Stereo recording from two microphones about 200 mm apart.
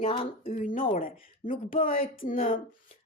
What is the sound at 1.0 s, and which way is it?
Speech, 45° left (ahead or behind).